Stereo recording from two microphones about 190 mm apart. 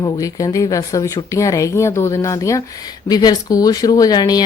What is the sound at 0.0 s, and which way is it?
Speech, 20° left (ahead or behind).